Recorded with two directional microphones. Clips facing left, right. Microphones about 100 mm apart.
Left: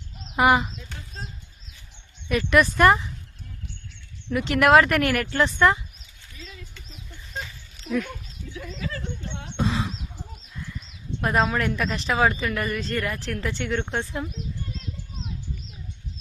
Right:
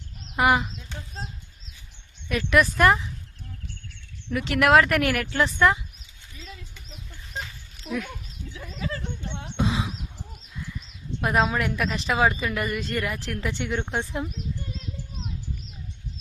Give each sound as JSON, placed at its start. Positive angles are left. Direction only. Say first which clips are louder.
{"t": 0.3, "sound": "speech", "louder": "left 2 dB", "side_deg": 0}
{"t": 2.3, "sound": "speech", "louder": "left 1 dB", "side_deg": 0}
{"t": 4.3, "sound": "speech", "louder": "left 2 dB", "side_deg": 0}
{"t": 7.9, "sound": "speech", "louder": "left 4 dB", "side_deg": 0}
{"t": 8.5, "sound": "a sound", "louder": "even", "side_deg": -30}
{"t": 9.6, "sound": "a sound", "louder": "even", "side_deg": -10}
{"t": 11.2, "sound": "a woman's voice", "louder": "even", "side_deg": -5}